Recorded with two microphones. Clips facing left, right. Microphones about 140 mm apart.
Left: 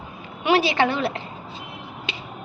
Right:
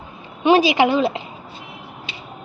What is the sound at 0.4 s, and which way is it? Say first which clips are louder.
Speech: right 5 dB; 20° right (ahead or behind).